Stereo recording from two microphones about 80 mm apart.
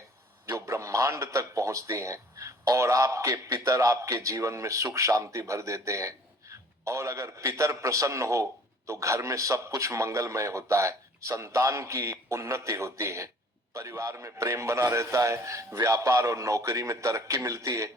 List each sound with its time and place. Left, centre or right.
0.6 s a man's voice: right